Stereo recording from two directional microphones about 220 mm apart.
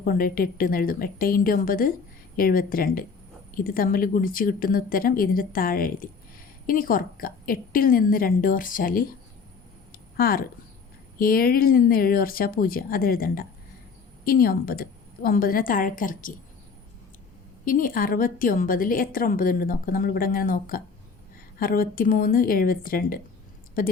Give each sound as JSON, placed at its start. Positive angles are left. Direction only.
{"t": 0.0, "sound": "a woman's voice", "side_deg": 40}
{"t": 10.2, "sound": "a woman's voice", "side_deg": 40}
{"t": 17.7, "sound": "a woman's voice", "side_deg": 40}